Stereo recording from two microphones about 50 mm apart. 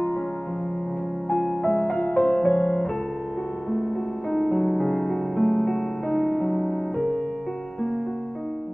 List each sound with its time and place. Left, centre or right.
1.6 s music: left
4.3 s music: centre
6.0 s music: left